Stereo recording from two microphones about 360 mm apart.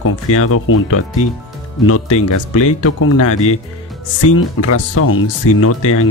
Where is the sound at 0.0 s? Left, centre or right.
Left.